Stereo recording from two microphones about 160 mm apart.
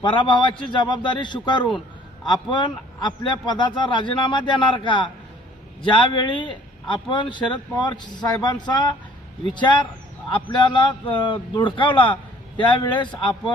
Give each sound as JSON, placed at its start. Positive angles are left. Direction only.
{"t": 0.0, "sound": "a man's voice", "side_deg": 30}